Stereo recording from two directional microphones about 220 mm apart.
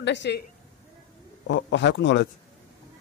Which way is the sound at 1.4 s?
55° left (ahead or behind).